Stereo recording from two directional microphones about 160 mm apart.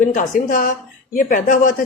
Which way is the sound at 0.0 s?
55° left (ahead or behind).